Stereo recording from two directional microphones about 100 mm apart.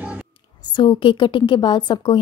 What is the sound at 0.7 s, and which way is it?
A woman's voice, 55° left (ahead or behind).